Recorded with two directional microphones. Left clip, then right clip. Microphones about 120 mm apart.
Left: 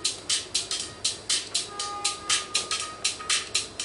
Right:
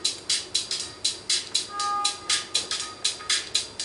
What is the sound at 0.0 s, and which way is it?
Music, 10° left (ahead or behind).